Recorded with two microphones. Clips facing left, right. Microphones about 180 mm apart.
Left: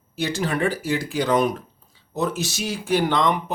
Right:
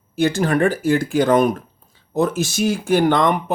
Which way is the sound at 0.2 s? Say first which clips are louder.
Right 6 dB; 50° right (ahead or behind).